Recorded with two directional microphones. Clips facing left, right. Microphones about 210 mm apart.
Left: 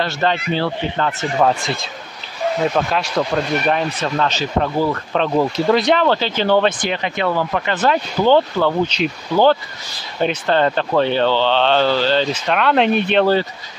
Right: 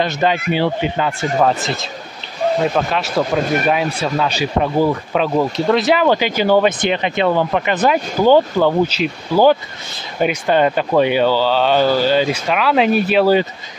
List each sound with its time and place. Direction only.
0.0 s speech: 15° right (ahead or behind)
6.8 s speech: 20° right (ahead or behind)